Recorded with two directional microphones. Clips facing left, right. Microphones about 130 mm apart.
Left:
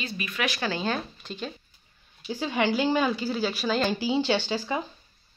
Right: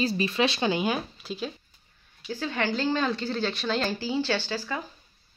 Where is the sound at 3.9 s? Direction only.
20° left (ahead or behind).